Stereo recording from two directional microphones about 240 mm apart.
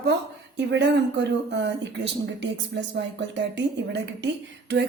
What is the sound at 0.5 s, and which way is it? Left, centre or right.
Speech, right.